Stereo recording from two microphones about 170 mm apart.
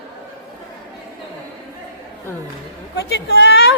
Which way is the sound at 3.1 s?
80° left.